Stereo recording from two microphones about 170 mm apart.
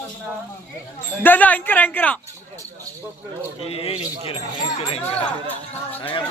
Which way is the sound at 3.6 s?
35° left (ahead or behind).